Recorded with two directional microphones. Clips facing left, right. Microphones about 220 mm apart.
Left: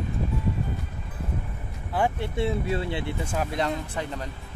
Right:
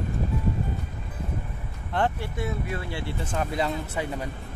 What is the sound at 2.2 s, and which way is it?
Speech, 25° left (ahead or behind).